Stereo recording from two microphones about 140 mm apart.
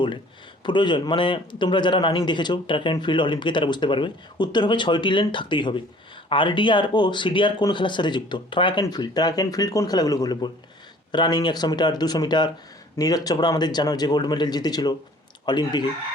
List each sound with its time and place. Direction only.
0.6 s a man's voice: 35° left (ahead or behind)